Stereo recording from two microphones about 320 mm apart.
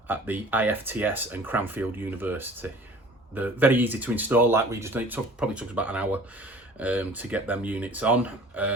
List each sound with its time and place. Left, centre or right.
0.1 s speech: centre